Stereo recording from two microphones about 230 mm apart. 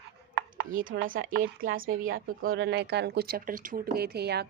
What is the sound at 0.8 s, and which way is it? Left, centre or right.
A woman's voice, right.